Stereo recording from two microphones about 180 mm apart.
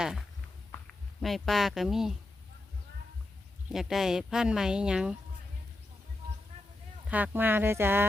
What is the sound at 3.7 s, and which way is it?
Speech, centre (ahead or behind).